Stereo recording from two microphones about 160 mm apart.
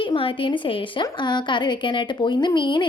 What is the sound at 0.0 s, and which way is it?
A woman's voice, 35° left (ahead or behind).